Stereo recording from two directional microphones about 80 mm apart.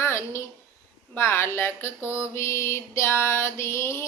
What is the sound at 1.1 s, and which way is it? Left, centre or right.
Speech, left.